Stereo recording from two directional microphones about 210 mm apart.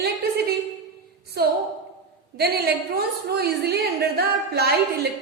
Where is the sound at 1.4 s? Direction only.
50° right (ahead or behind).